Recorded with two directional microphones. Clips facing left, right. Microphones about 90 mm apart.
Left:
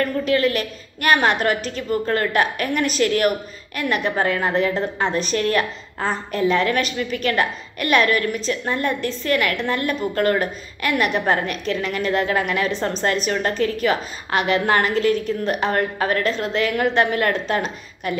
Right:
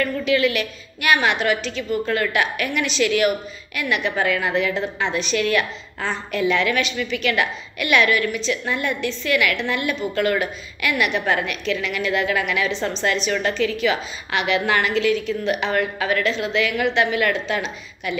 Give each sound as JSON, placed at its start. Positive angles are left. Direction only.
{"t": 0.0, "sound": "a woman's voice", "side_deg": 40}